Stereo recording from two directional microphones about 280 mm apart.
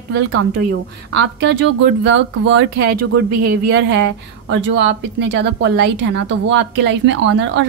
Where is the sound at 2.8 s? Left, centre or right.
Right.